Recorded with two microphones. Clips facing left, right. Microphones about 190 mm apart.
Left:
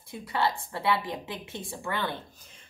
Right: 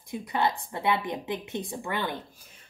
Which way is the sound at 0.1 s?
20° right (ahead or behind).